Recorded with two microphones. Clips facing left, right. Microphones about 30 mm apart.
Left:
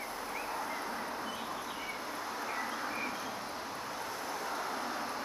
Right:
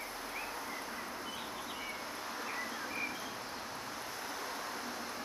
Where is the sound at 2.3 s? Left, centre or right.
Centre.